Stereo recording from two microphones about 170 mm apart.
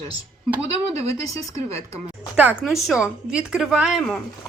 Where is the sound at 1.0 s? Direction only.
20° left (ahead or behind).